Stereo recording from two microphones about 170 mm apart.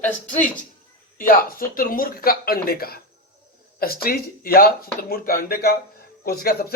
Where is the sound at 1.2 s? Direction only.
55° left (ahead or behind).